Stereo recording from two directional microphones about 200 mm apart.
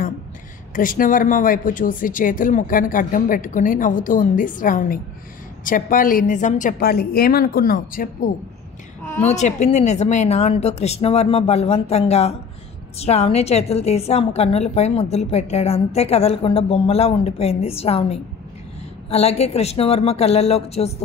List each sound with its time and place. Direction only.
0.7 s a woman's voice: 45° left (ahead or behind)